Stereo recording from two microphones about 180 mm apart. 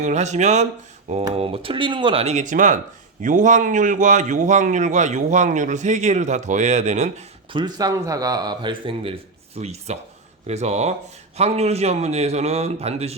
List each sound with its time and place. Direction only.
0.0 s a man's voice: 40° right (ahead or behind)
7.5 s a man's voice: 20° right (ahead or behind)